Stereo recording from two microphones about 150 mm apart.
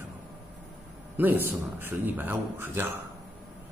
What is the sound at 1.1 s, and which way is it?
A man's voice, 15° right (ahead or behind).